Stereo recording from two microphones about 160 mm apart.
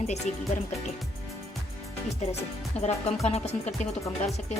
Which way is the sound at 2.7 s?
40° left (ahead or behind).